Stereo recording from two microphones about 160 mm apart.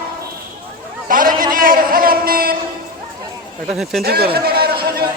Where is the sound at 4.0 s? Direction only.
75° right (ahead or behind).